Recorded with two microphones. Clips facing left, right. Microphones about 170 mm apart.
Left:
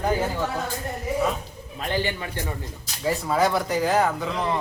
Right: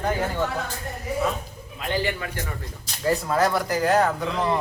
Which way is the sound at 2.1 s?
25° left (ahead or behind).